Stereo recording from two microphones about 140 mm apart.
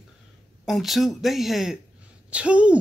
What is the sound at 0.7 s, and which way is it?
Speech, centre (ahead or behind).